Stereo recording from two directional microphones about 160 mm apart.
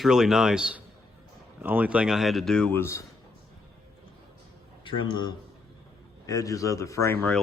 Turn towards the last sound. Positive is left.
turn(degrees=10)  # may be behind; listen again after turning